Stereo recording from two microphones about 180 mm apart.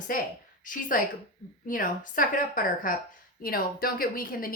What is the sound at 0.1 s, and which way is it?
A woman's voice, 50° left (ahead or behind).